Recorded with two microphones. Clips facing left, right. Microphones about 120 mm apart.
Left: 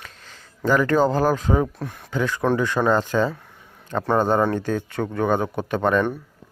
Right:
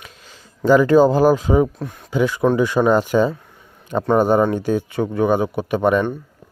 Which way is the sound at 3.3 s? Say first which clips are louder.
Right 3 dB; centre (ahead or behind).